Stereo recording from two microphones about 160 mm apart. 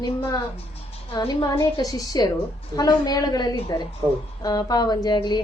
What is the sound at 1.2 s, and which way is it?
A woman's voice, 30° left (ahead or behind).